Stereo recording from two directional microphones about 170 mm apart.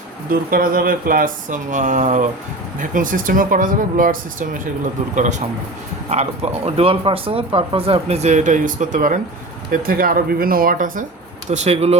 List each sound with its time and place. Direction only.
0.3 s speech: 55° right (ahead or behind)
11.5 s speech: 40° right (ahead or behind)